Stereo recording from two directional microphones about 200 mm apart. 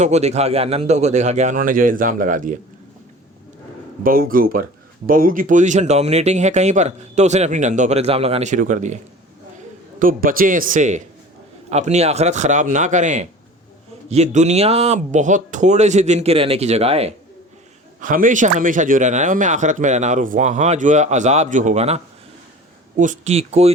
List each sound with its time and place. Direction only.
0.0 s speech: 35° right (ahead or behind)
4.0 s speech: 45° right (ahead or behind)
10.0 s speech: 45° right (ahead or behind)
18.0 s speech: 40° right (ahead or behind)